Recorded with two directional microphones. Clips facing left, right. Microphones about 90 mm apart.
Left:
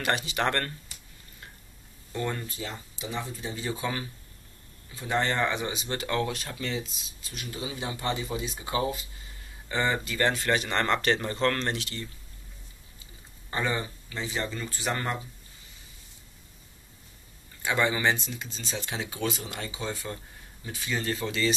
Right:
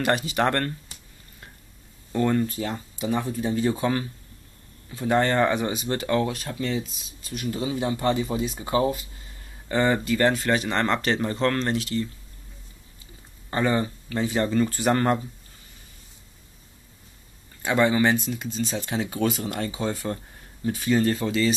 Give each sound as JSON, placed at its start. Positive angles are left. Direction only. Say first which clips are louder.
{"t": 0.0, "sound": "speech", "louder": "right 5 dB", "side_deg": -40}
{"t": 2.1, "sound": "speech", "louder": "right 9 dB", "side_deg": -40}
{"t": 2.5, "sound": "speech", "louder": "right 8 dB", "side_deg": -50}
{"t": 6.0, "sound": "speech", "louder": "right 5 dB", "side_deg": -20}
{"t": 7.2, "sound": "speech", "louder": "right 8 dB", "side_deg": -40}
{"t": 10.3, "sound": "speech", "louder": "right 3 dB", "side_deg": -5}
{"t": 11.1, "sound": "speech", "louder": "right 2 dB", "side_deg": -20}
{"t": 11.7, "sound": "speech", "louder": "right 9 dB", "side_deg": -35}
{"t": 13.5, "sound": "speech", "louder": "right 6 dB", "side_deg": -40}
{"t": 17.6, "sound": "speech", "louder": "right 5 dB", "side_deg": -30}